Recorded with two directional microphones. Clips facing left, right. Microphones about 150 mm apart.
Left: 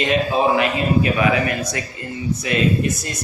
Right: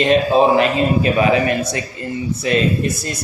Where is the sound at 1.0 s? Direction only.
25° right (ahead or behind).